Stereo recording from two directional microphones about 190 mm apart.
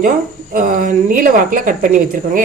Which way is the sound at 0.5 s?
45° right (ahead or behind).